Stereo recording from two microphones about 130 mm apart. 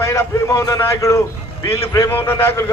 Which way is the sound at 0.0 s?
20° left (ahead or behind).